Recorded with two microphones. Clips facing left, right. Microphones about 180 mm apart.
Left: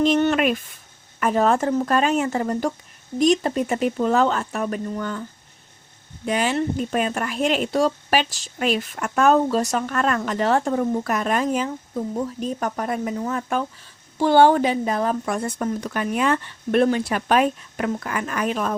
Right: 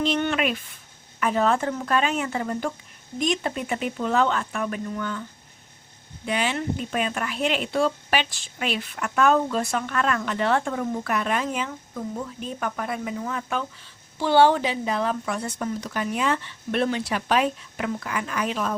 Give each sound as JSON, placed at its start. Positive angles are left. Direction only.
{"t": 0.0, "sound": "speech", "side_deg": 45}
{"t": 6.2, "sound": "speech", "side_deg": 45}